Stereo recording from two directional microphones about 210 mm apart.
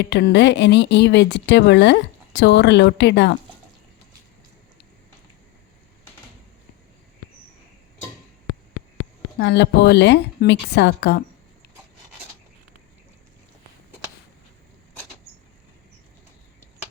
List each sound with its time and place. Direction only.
0.0 s speech: 55° left (ahead or behind)
9.4 s speech: 55° left (ahead or behind)